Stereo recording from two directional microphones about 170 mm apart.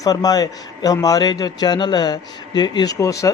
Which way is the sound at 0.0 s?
20° left (ahead or behind).